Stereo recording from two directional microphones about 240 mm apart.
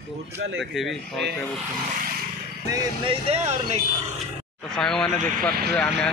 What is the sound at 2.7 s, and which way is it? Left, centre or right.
Speech, right.